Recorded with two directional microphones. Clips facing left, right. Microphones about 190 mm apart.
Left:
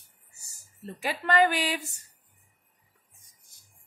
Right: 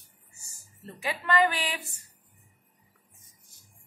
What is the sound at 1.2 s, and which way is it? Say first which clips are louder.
Speech: left 2 dB; 40° left (ahead or behind).